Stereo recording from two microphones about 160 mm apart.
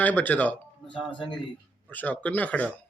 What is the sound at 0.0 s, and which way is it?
Speech, 10° left (ahead or behind).